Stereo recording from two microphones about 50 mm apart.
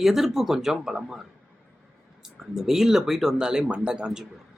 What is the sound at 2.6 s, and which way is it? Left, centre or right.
Speech, centre.